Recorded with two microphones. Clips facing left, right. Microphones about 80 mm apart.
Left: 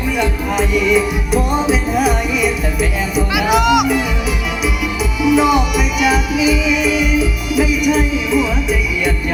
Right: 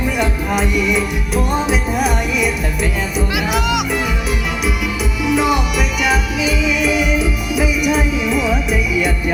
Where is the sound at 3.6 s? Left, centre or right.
Left.